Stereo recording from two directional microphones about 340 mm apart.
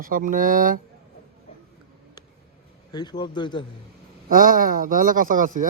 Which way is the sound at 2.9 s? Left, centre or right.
Centre.